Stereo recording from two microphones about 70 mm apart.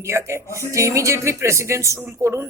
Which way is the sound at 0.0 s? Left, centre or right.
Right.